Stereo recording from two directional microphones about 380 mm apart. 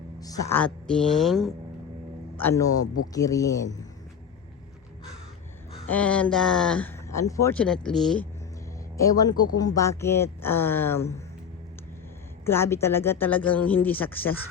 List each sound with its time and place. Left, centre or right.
0.2 s speech: centre
2.8 s speech: left
3.2 s speech: centre
5.9 s speech: centre
12.5 s speech: centre